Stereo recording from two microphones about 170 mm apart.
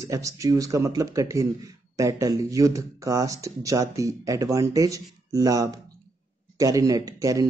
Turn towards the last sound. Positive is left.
turn(degrees=-20)  # may be behind; listen again after turning